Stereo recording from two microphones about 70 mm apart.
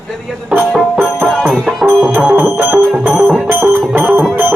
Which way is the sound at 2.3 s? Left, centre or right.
Right.